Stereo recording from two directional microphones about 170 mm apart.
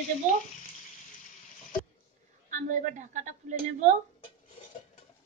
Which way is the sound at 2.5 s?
45° right (ahead or behind).